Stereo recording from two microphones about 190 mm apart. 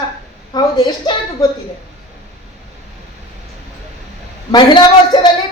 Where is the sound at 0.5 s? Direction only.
20° left (ahead or behind).